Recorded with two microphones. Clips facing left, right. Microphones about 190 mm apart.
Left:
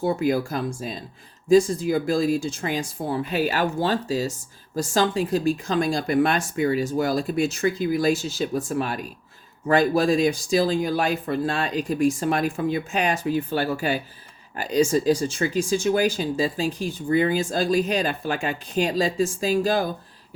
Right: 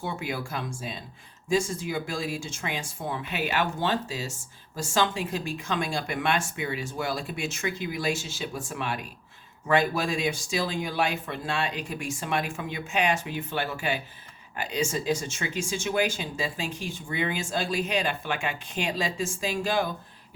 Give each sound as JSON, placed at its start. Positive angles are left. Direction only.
{"t": 0.0, "sound": "speech", "side_deg": 40}